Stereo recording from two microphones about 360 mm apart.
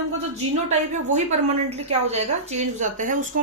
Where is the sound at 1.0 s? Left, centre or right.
Centre.